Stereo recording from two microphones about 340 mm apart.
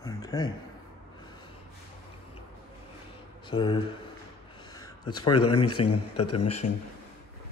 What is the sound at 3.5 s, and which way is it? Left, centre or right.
Speech, centre.